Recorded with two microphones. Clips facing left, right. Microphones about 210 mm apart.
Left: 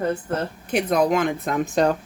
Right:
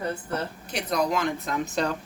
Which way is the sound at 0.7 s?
55° left (ahead or behind).